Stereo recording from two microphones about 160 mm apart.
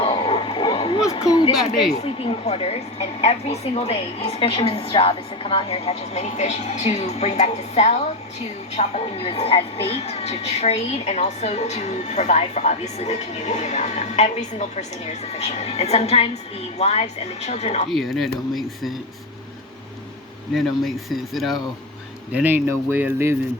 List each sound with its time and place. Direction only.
0.0 s a sound: 35° left (ahead or behind)
1.9 s a woman's voice: 40° left (ahead or behind)
17.8 s speech: centre (ahead or behind)
20.5 s speech: centre (ahead or behind)
22.3 s speech: 10° right (ahead or behind)